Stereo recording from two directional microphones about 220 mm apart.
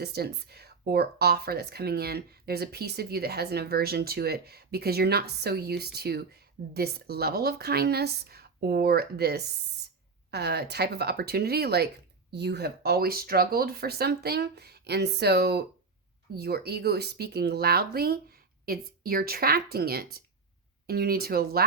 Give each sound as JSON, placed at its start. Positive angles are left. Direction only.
{"t": 0.0, "sound": "speech", "side_deg": -45}
{"t": 9.8, "sound": "a sound", "side_deg": -45}
{"t": 10.3, "sound": "speech", "side_deg": -50}